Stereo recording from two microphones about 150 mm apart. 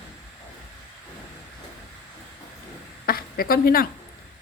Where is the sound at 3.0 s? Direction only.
80° left.